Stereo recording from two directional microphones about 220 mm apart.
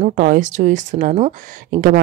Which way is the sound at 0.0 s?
35° right (ahead or behind).